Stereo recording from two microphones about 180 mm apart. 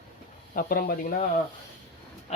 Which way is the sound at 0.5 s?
55° left (ahead or behind).